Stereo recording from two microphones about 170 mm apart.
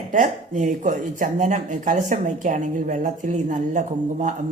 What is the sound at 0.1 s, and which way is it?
Speech, 50° right (ahead or behind).